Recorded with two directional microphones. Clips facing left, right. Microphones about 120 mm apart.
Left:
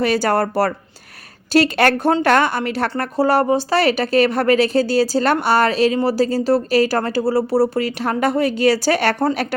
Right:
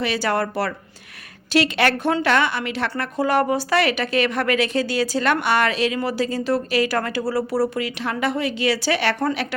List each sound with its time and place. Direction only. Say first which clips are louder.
0.0 s a woman's voice: left 5 dB; 45° left (ahead or behind)
7.9 s speech: left 5 dB; 40° left (ahead or behind)